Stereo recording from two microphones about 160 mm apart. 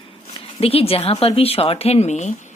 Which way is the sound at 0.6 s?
35° left (ahead or behind).